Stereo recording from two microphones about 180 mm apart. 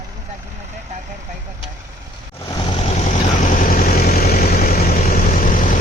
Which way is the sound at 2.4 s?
25° left (ahead or behind).